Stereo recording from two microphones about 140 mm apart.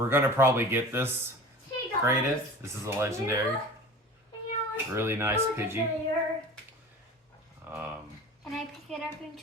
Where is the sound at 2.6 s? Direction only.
20° right (ahead or behind).